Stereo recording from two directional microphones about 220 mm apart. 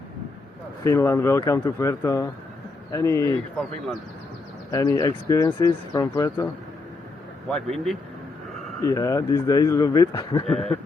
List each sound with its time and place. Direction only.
0.9 s speech: 15° left (ahead or behind)
4.7 s speech: 15° left (ahead or behind)
8.8 s speech: 15° left (ahead or behind)
10.4 s speech: centre (ahead or behind)